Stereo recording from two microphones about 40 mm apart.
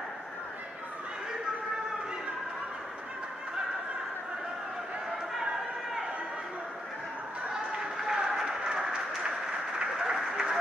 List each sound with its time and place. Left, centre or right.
7.5 s run: centre
9.9 s applause: centre